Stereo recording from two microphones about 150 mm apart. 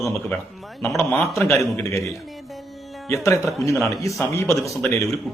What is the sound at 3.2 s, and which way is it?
Speech, 20° left (ahead or behind).